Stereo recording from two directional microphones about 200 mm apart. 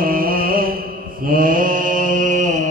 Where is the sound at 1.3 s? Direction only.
45° right (ahead or behind).